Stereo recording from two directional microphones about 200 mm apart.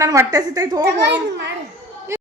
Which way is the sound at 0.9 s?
60° right (ahead or behind).